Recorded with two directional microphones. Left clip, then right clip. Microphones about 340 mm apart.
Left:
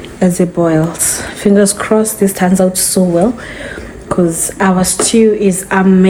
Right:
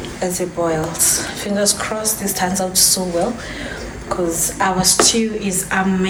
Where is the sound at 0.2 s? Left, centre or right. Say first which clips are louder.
Left 8 dB; left.